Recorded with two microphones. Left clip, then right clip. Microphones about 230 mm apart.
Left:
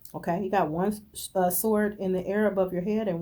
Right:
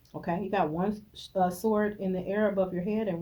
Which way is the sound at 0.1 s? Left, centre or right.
Left.